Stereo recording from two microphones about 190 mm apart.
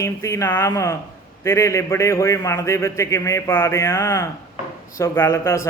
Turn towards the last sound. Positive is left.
turn(degrees=15)  # may be behind; listen again after turning